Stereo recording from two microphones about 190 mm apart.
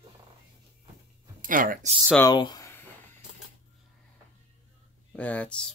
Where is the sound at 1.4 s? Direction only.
45° right (ahead or behind).